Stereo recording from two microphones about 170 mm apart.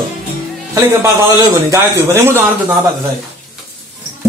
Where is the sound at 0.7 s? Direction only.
15° right (ahead or behind).